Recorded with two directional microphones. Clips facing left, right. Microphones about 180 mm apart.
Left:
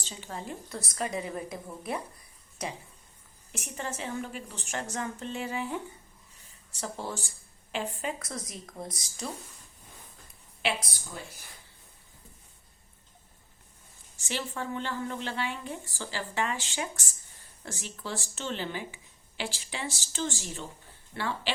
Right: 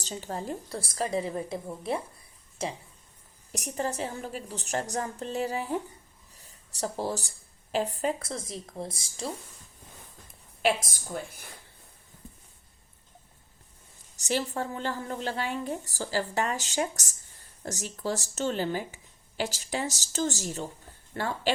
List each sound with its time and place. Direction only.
0.0 s speech: 40° right (ahead or behind)
3.5 s a woman's voice: 40° right (ahead or behind)
10.6 s speech: 45° right (ahead or behind)
14.2 s a woman's voice: 40° right (ahead or behind)